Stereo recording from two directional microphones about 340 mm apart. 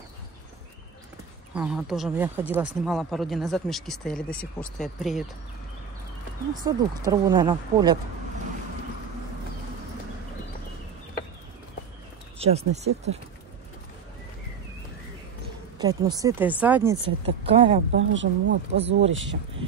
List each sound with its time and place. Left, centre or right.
1.5 s speech: centre
6.6 s speech: centre
12.4 s speech: centre
15.8 s speech: centre
17.5 s speech: centre
17.9 s speech: right